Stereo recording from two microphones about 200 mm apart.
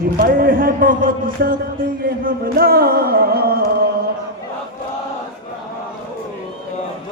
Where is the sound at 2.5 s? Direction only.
50° right (ahead or behind).